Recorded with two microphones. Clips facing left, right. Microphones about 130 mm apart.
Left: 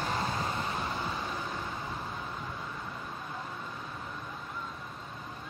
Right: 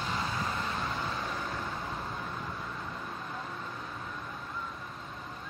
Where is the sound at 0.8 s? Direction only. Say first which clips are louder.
Even; 10° left (ahead or behind).